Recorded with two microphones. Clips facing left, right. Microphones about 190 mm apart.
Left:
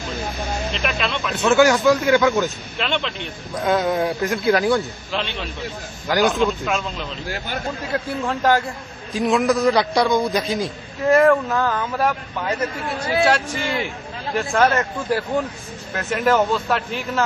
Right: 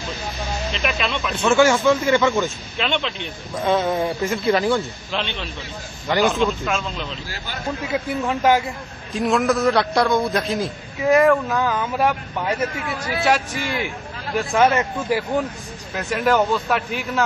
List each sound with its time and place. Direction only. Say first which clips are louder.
0.8 s a man's voice: right 1 dB; centre (ahead or behind)
7.2 s speech: left 5 dB; 55° left (ahead or behind)
7.9 s a man's voice: right 1 dB; 5° right (ahead or behind)
13.2 s a man's voice: even; centre (ahead or behind)